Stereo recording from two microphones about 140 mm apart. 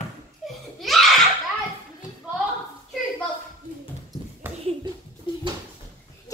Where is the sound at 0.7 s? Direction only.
Centre (ahead or behind).